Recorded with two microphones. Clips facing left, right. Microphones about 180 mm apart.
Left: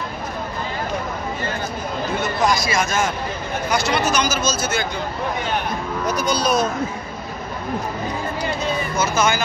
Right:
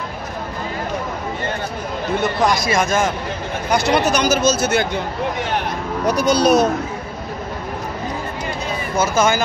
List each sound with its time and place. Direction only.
2.5 s speech: 55° right (ahead or behind)
8.9 s speech: 50° right (ahead or behind)